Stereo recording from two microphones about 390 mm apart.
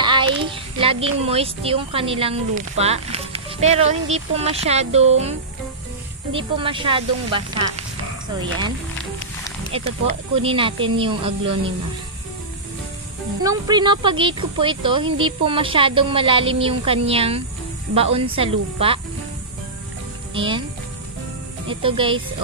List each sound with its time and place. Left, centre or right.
0.0 s speech: centre
6.3 s speech: centre
13.4 s speech: centre
20.3 s speech: centre
21.6 s speech: centre